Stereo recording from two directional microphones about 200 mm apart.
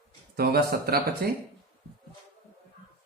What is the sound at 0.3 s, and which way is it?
Speech, 50° right (ahead or behind).